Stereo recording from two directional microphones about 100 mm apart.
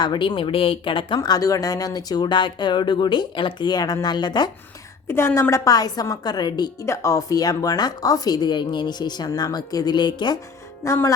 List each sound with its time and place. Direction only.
0.0 s speech: 50° left (ahead or behind)
5.0 s a woman's voice: 25° left (ahead or behind); by 6.7 s 45° left (ahead or behind)
6.8 s speech: 30° left (ahead or behind); by 10.3 s 50° left (ahead or behind)
10.8 s a woman's voice: 30° left (ahead or behind)